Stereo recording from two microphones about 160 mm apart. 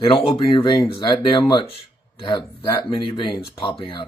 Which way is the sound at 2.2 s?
30° left (ahead or behind).